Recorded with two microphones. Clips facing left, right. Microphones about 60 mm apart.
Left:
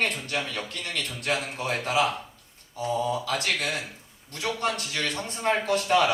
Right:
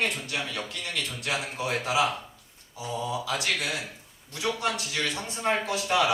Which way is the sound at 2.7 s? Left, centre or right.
Left.